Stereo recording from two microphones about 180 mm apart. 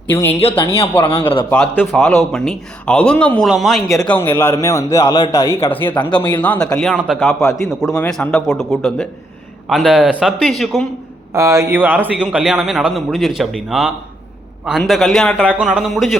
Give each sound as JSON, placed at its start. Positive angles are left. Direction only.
{"t": 0.1, "sound": "a man's voice", "side_deg": 10}
{"t": 0.3, "sound": "speech", "side_deg": 30}
{"t": 1.5, "sound": "a man's voice", "side_deg": 5}
{"t": 4.0, "sound": "a man's voice", "side_deg": 10}
{"t": 7.3, "sound": "a man's voice", "side_deg": 15}
{"t": 7.8, "sound": "a man's voice", "side_deg": 0}
{"t": 11.3, "sound": "a man's voice", "side_deg": -15}